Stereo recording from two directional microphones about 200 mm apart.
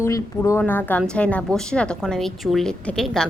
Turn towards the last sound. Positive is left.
turn(degrees=5)  # may be behind; listen again after turning